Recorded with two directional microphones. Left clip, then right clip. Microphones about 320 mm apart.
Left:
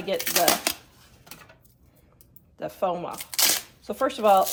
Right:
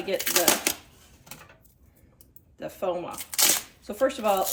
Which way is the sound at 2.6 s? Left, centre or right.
Centre.